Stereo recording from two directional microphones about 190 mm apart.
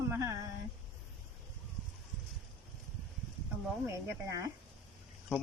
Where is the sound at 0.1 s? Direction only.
15° right (ahead or behind).